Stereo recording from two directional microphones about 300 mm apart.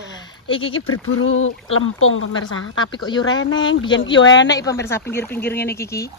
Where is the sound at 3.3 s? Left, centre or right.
Left.